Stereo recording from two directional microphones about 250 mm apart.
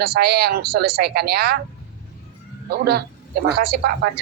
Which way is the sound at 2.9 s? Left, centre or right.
Right.